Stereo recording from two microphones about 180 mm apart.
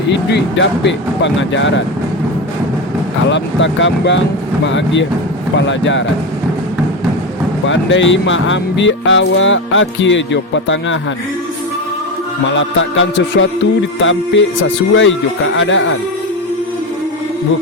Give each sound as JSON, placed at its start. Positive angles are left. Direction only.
{"t": 0.1, "sound": "speech", "side_deg": 85}
{"t": 3.2, "sound": "speech", "side_deg": 90}
{"t": 7.7, "sound": "speech", "side_deg": 90}
{"t": 12.5, "sound": "speech", "side_deg": 90}